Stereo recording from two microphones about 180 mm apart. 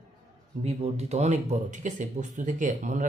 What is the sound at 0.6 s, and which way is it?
Speech, 35° right (ahead or behind).